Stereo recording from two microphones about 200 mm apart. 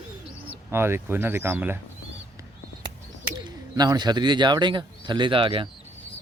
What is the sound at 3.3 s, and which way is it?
Speech, 20° right (ahead or behind).